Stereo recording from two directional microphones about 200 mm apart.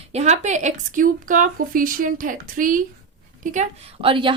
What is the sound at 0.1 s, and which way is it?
A woman's voice, 35° right (ahead or behind).